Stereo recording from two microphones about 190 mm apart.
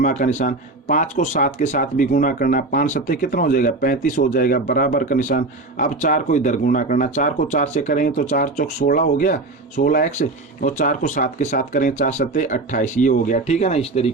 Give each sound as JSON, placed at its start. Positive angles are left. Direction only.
{"t": 0.0, "sound": "speech", "side_deg": 40}